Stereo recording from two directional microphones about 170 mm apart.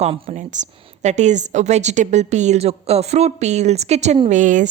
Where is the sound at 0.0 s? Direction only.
40° right (ahead or behind).